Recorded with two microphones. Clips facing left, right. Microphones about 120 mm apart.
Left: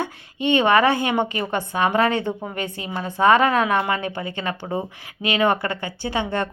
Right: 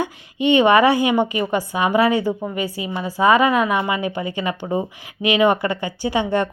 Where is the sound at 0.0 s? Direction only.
15° right (ahead or behind).